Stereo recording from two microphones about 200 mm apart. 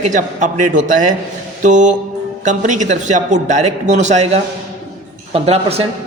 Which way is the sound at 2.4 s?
35° right (ahead or behind).